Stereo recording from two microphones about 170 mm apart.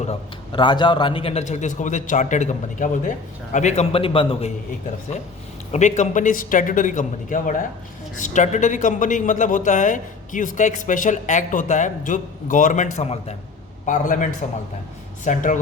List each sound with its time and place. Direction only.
0.0 s a man's voice: 35° left (ahead or behind)
5.7 s a man's voice: 45° left (ahead or behind)
13.8 s a man's voice: 50° left (ahead or behind)